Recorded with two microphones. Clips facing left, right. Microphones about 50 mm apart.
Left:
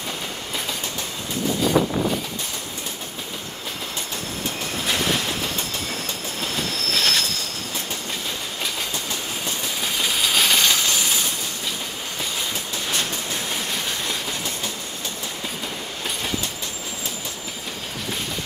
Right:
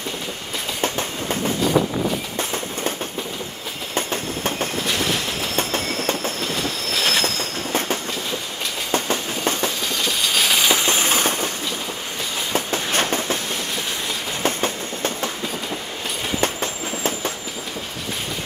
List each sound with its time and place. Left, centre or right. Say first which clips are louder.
0.7 s train: right 6 dB; right
3.9 s train: right 6 dB; right
6.4 s train: right 2 dB; centre
8.9 s train: right 6 dB; right
10.0 s train: even; centre
10.7 s train: right 3 dB; right
12.5 s train: right 5 dB; right
14.4 s train: right 7 dB; right